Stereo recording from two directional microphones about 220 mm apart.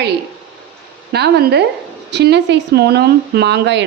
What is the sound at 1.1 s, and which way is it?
Speech, 50° right (ahead or behind).